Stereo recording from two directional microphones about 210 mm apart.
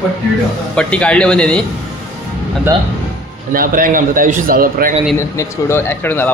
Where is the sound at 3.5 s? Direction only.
40° right (ahead or behind).